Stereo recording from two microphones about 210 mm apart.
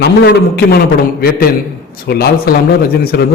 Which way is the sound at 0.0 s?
50° left (ahead or behind).